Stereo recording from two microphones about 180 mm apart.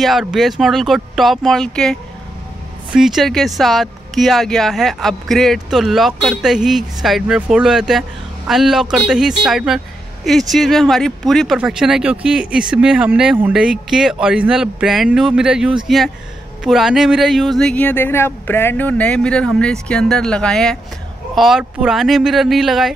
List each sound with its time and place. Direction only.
0.0 s speech: centre (ahead or behind)